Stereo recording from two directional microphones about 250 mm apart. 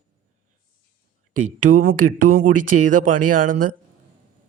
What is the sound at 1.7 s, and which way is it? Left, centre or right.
Speech, right.